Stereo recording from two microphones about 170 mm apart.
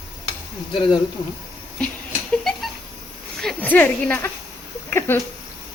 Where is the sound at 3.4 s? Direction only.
5° left (ahead or behind).